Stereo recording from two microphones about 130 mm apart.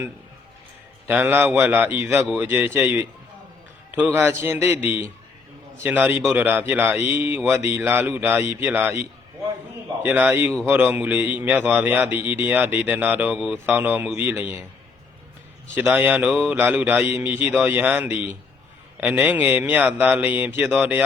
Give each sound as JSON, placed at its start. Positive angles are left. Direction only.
{"t": 1.0, "sound": "a man's voice", "side_deg": -15}
{"t": 10.1, "sound": "a man's voice", "side_deg": -10}
{"t": 15.8, "sound": "a man's voice", "side_deg": -15}